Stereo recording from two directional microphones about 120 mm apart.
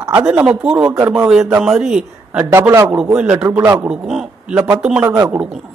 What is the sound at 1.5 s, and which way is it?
A man's voice, 5° right (ahead or behind).